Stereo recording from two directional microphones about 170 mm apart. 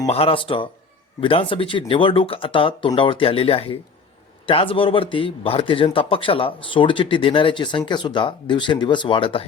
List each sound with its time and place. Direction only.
0.1 s speech: 35° left (ahead or behind)